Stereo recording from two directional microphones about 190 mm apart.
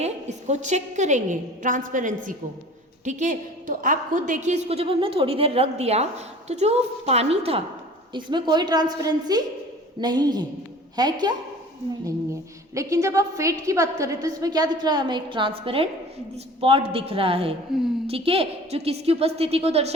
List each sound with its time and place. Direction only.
0.0 s a woman's voice: 35° right (ahead or behind); by 11.3 s 20° right (ahead or behind)
12.7 s a woman's voice: 15° right (ahead or behind)
17.7 s a woman's voice: centre (ahead or behind)
18.0 s a woman's voice: 30° right (ahead or behind)